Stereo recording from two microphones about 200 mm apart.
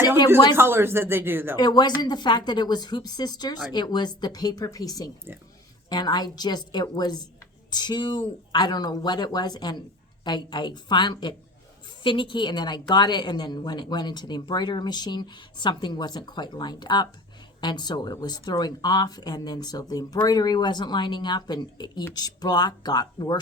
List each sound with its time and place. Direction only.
0.5 s speech: 10° right (ahead or behind)
1.5 s speech: 20° left (ahead or behind)